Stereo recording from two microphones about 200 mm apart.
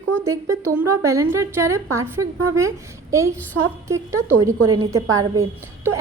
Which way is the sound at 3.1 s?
15° right (ahead or behind).